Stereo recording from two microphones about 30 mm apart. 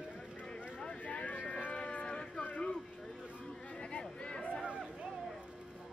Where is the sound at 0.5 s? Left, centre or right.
Left.